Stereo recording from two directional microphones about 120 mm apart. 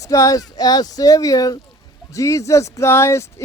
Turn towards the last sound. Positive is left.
turn(degrees=20)  # may be behind; listen again after turning